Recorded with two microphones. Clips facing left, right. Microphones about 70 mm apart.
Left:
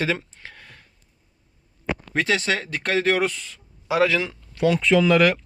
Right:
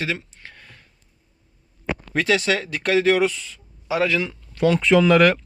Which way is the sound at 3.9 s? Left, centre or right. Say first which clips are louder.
Left 1 dB; left.